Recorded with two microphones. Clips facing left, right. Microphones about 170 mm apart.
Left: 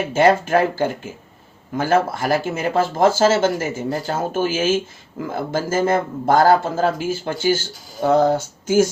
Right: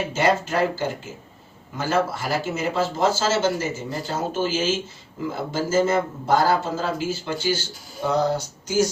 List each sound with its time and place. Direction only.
0.1 s speech: 50° left (ahead or behind)